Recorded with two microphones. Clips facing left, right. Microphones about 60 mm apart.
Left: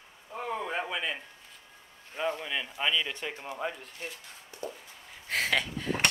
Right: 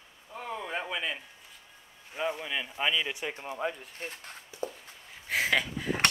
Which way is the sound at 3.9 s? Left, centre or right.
Right.